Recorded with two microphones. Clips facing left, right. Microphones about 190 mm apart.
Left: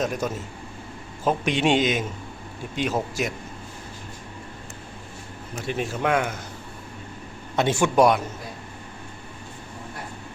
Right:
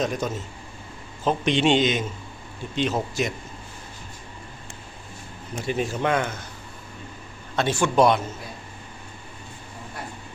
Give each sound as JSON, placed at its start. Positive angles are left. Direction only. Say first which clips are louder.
{"t": 0.0, "sound": "a man's voice", "louder": "even", "side_deg": 5}
{"t": 5.6, "sound": "speech", "louder": "right 1 dB", "side_deg": 0}
{"t": 7.5, "sound": "a man's voice", "louder": "left 1 dB", "side_deg": 20}